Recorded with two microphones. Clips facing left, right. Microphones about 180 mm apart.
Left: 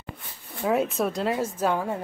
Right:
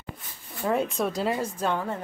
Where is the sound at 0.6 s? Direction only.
5° left (ahead or behind).